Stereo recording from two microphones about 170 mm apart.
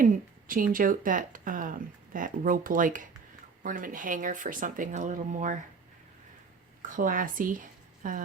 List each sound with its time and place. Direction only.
0.0 s speech: 55° right (ahead or behind)
6.8 s speech: 50° right (ahead or behind)